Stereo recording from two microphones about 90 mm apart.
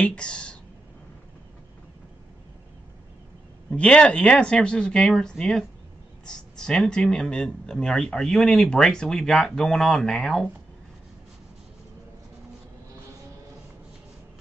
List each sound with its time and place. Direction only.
0.0 s speech: 10° left (ahead or behind)
3.7 s speech: 10° left (ahead or behind)